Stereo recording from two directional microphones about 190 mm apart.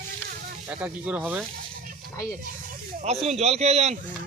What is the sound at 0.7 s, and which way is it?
Speech, 5° right (ahead or behind).